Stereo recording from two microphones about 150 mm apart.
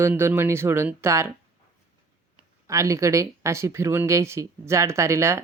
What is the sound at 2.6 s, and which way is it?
Speech, 20° right (ahead or behind).